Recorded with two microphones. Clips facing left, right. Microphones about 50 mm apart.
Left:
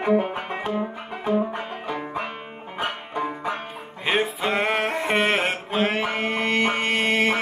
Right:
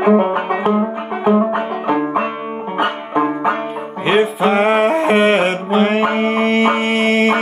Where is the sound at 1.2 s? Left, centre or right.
Right.